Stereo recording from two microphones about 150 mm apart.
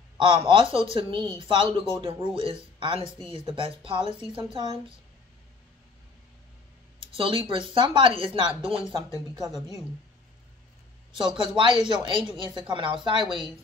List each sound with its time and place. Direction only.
0.2 s speech: 35° right (ahead or behind)
7.0 s speech: 35° right (ahead or behind)
11.1 s speech: 30° right (ahead or behind)